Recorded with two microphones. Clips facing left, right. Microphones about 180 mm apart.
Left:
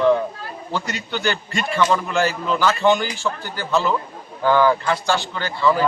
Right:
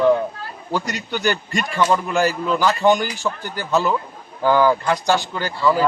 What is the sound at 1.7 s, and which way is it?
Speech, 10° right (ahead or behind).